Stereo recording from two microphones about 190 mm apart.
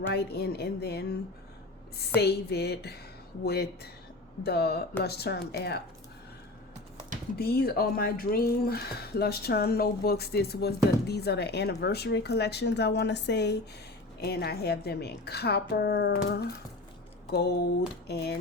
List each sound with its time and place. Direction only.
0.1 s speech: 55° left (ahead or behind)
2.2 s speech: 60° left (ahead or behind)
7.3 s speech: 55° left (ahead or behind)